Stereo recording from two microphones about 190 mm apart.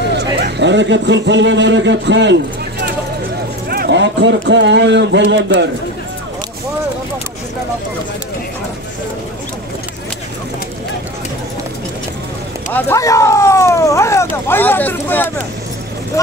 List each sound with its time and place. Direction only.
0.1 s speech: 65° right (ahead or behind)
3.7 s speech: 60° right (ahead or behind)
12.7 s speech: 15° left (ahead or behind)